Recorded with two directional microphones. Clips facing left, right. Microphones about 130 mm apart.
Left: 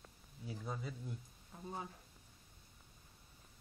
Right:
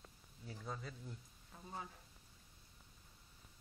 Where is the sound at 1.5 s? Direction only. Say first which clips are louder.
Left 6 dB; 20° left (ahead or behind).